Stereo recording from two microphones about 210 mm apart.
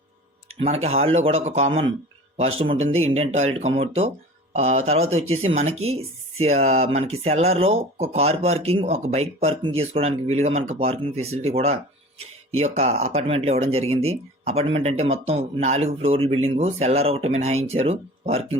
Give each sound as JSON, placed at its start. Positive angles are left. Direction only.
{"t": 0.6, "sound": "speech", "side_deg": -30}